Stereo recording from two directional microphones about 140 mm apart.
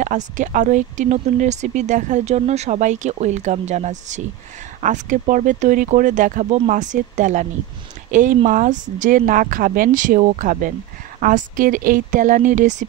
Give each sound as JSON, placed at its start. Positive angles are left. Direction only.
{"t": 0.0, "sound": "speech", "side_deg": -65}
{"t": 4.8, "sound": "speech", "side_deg": -70}